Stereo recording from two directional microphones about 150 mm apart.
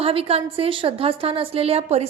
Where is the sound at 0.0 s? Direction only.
40° right (ahead or behind).